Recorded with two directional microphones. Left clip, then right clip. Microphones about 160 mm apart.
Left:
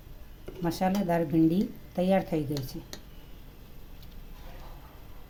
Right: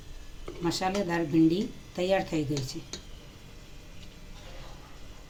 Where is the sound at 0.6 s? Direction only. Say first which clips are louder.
Even; 60° left (ahead or behind).